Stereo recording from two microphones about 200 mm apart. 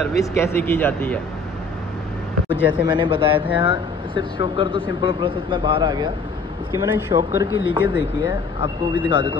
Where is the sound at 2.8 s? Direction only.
25° right (ahead or behind).